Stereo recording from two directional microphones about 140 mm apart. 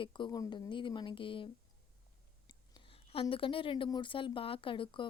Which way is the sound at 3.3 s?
40° left (ahead or behind).